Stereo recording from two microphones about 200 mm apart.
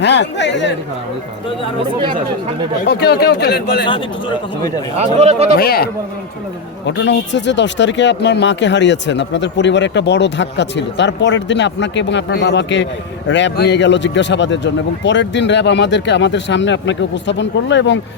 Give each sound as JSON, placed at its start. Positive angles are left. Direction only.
{"t": 0.0, "sound": "speech", "side_deg": 60}
{"t": 2.8, "sound": "speech", "side_deg": 55}
{"t": 4.9, "sound": "speech", "side_deg": -30}
{"t": 5.5, "sound": "speech", "side_deg": 50}
{"t": 6.8, "sound": "speech", "side_deg": 60}